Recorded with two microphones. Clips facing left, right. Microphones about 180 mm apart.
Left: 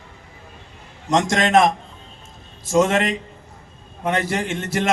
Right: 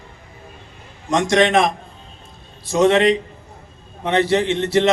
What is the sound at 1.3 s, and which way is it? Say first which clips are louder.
A man's voice: right 2 dB; 45° left (ahead or behind).